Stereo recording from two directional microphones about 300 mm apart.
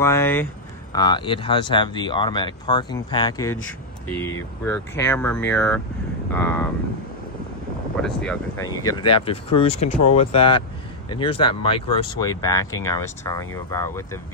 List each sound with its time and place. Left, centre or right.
0.0 s speech: centre
8.0 s speech: centre